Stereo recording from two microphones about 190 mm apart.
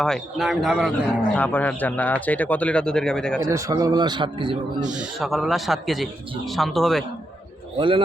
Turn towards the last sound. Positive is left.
turn(degrees=-25)  # may be behind; listen again after turning